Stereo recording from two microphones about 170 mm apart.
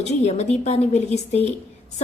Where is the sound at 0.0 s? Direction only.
40° left (ahead or behind).